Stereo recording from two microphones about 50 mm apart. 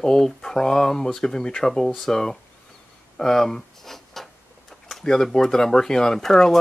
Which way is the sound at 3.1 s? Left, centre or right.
Centre.